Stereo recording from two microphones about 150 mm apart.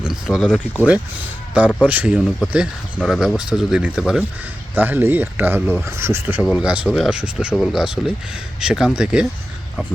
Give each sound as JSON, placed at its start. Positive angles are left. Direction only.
{"t": 0.0, "sound": "speech", "side_deg": 0}
{"t": 1.5, "sound": "speech", "side_deg": -10}